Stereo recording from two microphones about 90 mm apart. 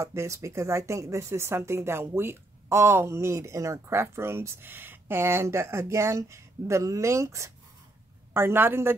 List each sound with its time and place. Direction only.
0.0 s a woman's voice: 30° right (ahead or behind)